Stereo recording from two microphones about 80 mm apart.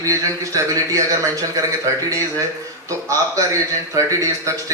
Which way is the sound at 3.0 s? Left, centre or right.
Right.